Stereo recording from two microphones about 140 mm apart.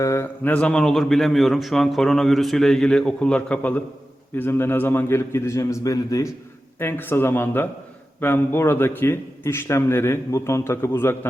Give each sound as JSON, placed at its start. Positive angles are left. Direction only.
{"t": 0.0, "sound": "a man's voice", "side_deg": 20}